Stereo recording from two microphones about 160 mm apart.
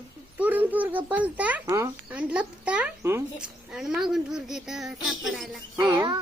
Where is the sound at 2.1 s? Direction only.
5° right (ahead or behind).